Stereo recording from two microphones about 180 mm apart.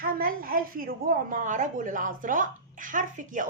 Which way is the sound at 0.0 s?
55° right (ahead or behind).